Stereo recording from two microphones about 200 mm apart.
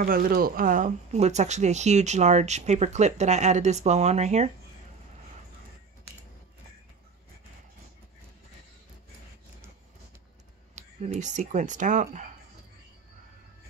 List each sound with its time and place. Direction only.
0.0 s speech: 45° right (ahead or behind)
10.7 s speech: 35° right (ahead or behind)